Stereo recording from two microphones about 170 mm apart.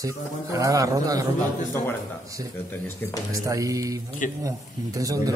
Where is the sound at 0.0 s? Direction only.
20° right (ahead or behind).